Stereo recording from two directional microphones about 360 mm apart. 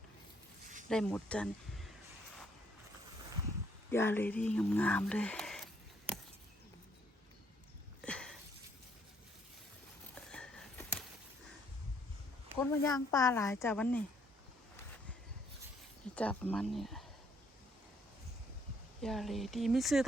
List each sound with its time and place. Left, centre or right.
0.9 s speech: centre
3.9 s speech: centre
8.0 s a sound: centre
10.2 s a sound: centre
12.5 s speech: centre
16.1 s speech: centre
19.0 s speech: centre